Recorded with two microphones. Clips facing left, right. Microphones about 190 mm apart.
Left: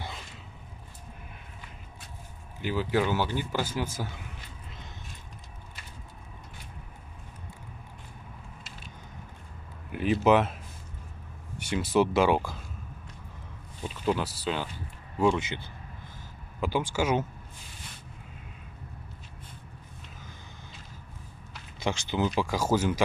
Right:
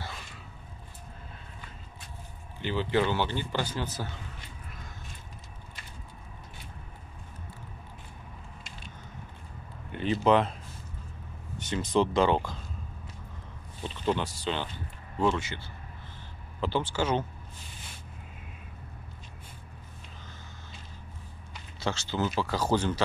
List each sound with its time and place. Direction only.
2.6 s a man's voice: 5° left (ahead or behind)
9.8 s speech: 5° left (ahead or behind)
13.8 s speech: 5° left (ahead or behind)
15.1 s a man's voice: 15° left (ahead or behind)
21.7 s a man's voice: 15° left (ahead or behind)